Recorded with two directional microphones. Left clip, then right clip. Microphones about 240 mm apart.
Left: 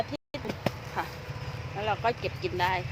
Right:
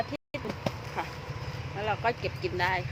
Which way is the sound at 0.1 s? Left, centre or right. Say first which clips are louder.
Right 1 dB; centre.